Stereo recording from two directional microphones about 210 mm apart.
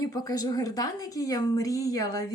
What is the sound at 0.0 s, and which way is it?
A woman's voice, 15° left (ahead or behind).